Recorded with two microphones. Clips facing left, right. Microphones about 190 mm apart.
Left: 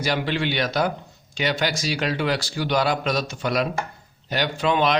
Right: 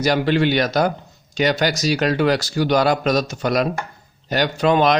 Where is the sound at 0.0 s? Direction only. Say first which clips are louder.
Right 7 dB; 45° right (ahead or behind).